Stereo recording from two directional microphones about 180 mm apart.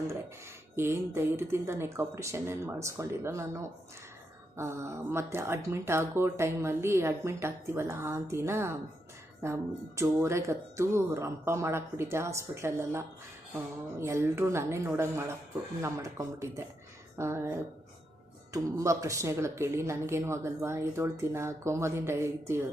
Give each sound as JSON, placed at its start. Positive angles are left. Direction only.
{"t": 0.8, "sound": "speech", "side_deg": -15}